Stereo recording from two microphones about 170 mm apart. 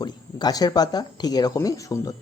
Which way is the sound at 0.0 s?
25° left (ahead or behind).